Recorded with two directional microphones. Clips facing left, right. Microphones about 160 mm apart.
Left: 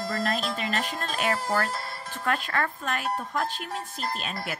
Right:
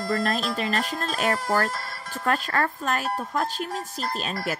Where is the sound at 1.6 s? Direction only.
25° left (ahead or behind).